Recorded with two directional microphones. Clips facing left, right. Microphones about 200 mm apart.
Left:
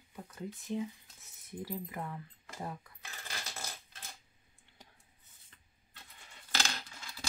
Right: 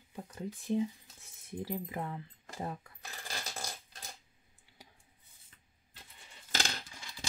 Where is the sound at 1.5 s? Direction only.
25° right (ahead or behind).